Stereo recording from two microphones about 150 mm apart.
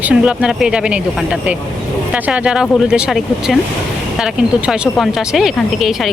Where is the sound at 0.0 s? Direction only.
5° right (ahead or behind).